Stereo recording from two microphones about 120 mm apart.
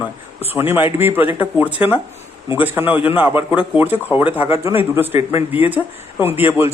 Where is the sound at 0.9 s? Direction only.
15° right (ahead or behind).